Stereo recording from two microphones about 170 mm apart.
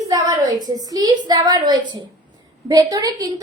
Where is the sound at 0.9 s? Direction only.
25° right (ahead or behind).